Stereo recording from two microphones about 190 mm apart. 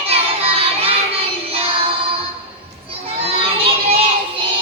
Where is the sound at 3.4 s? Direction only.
30° right (ahead or behind).